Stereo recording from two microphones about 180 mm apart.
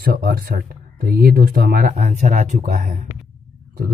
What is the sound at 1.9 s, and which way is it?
Speech, 40° right (ahead or behind).